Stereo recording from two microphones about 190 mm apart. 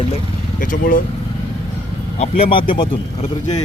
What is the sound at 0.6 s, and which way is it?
Speech, 45° left (ahead or behind).